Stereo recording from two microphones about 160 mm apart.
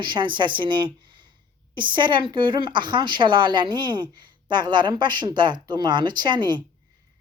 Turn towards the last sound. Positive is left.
turn(degrees=-30)  # may be behind; listen again after turning